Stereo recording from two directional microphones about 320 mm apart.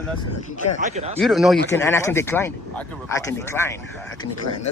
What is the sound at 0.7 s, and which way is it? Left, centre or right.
Speech, right.